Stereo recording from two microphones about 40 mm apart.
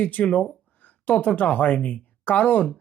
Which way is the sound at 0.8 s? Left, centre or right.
Left.